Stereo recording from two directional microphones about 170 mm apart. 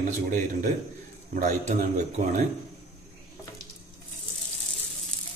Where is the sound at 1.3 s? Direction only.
45° right (ahead or behind).